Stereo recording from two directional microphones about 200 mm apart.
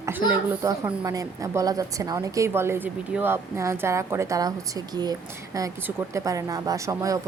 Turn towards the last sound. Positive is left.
turn(degrees=-15)  # may be behind; listen again after turning